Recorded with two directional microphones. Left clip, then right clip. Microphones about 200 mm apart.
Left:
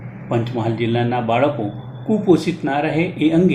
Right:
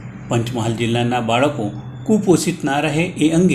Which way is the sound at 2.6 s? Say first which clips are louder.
Even; 30° right (ahead or behind).